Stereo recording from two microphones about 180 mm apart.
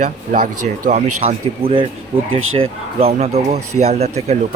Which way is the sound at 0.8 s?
40° right (ahead or behind).